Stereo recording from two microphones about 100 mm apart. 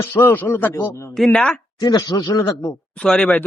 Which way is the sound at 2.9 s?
5° left (ahead or behind).